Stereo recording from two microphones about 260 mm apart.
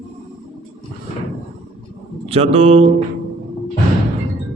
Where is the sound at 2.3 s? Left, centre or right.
Right.